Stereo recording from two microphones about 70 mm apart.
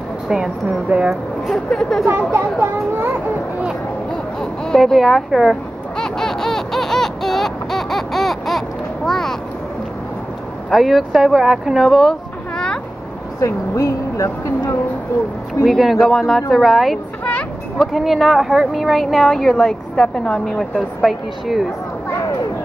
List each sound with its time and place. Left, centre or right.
0.3 s a woman's voice: centre
1.5 s speech: centre
2.0 s a child's voice: right
4.1 s a sound: centre
5.9 s baby laughter: centre
10.7 s speech: centre
13.4 s a woman's voice: left
15.6 s speech: centre
17.2 s a sound: centre
17.7 s speech: centre